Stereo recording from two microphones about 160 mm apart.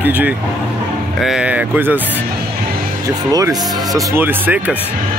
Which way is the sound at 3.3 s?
20° right (ahead or behind).